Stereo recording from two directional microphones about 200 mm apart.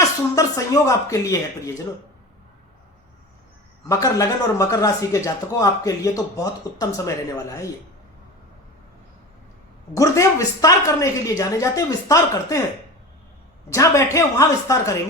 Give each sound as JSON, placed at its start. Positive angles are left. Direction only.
{"t": 0.3, "sound": "speech", "side_deg": 15}
{"t": 3.8, "sound": "speech", "side_deg": 15}
{"t": 9.9, "sound": "speech", "side_deg": 15}
{"t": 13.7, "sound": "speech", "side_deg": 15}